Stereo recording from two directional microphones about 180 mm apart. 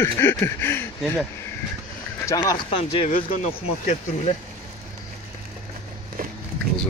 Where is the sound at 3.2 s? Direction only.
45° left (ahead or behind).